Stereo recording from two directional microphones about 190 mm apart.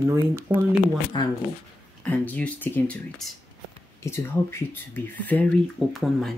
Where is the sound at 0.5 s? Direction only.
10° right (ahead or behind).